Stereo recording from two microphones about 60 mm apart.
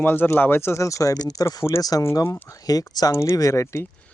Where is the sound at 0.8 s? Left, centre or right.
Left.